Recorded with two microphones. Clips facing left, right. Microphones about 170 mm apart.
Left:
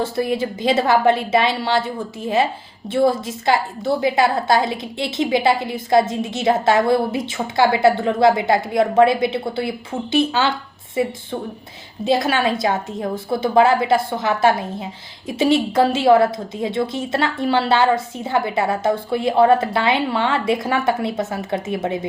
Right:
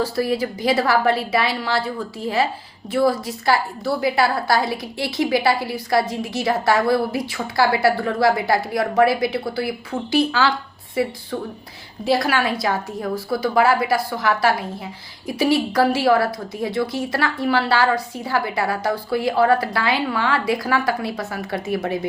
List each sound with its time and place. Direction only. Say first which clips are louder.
0.0 s a woman's voice: even; 20° left (ahead or behind)